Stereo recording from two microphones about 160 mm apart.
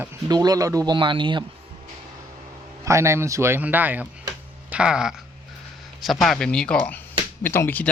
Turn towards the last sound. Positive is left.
turn(degrees=10)  # may be behind; listen again after turning